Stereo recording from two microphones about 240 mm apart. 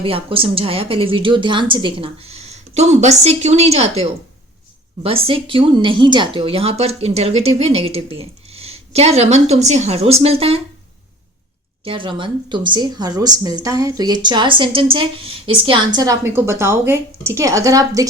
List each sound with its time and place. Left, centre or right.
0.0 s a woman's voice: right
5.0 s a woman's voice: right
11.9 s a woman's voice: right